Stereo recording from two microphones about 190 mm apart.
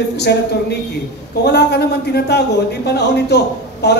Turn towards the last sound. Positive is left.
turn(degrees=60)  # may be behind; listen again after turning